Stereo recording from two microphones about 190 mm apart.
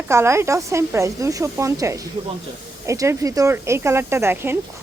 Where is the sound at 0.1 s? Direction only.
15° right (ahead or behind).